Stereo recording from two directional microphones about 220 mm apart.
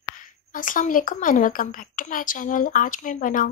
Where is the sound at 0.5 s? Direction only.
35° left (ahead or behind).